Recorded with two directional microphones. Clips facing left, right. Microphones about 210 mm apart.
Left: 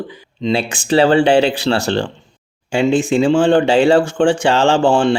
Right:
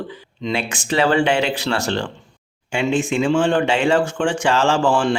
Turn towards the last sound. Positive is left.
turn(degrees=30)  # may be behind; listen again after turning